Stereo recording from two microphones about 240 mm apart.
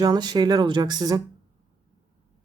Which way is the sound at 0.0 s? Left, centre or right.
Centre.